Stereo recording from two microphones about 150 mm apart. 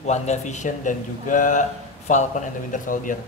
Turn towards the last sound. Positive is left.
turn(degrees=60)  # may be behind; listen again after turning